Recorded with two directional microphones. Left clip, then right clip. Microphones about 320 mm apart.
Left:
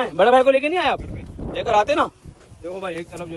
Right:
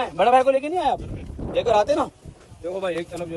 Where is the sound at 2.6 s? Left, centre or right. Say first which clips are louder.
Right 3 dB; centre.